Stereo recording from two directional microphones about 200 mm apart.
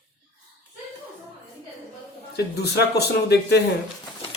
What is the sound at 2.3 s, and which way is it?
Speech, 55° left (ahead or behind).